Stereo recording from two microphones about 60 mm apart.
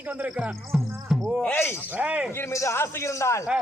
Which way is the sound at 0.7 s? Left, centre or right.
Centre.